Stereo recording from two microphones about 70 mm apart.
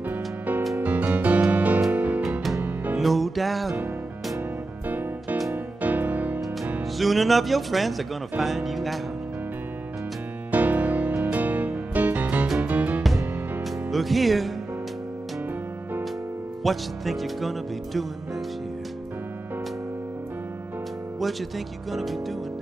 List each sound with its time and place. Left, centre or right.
0.1 s music: right
3.0 s music: centre
4.8 s music: right
7.0 s speech: centre
10.5 s music: right
13.8 s speech: centre
16.6 s speech: centre
21.2 s speech: centre